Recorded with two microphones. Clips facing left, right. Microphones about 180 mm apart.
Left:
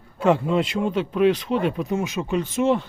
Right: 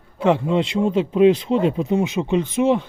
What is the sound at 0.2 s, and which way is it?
Speech, 20° right (ahead or behind).